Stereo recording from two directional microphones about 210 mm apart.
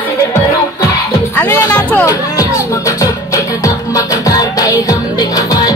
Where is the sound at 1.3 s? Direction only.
10° left (ahead or behind).